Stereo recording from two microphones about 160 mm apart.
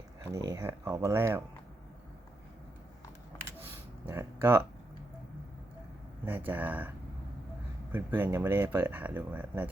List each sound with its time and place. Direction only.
0.2 s speech: 20° right (ahead or behind)
3.6 s a sound: 15° right (ahead or behind)
6.2 s speech: 10° right (ahead or behind)
7.9 s speech: 15° right (ahead or behind)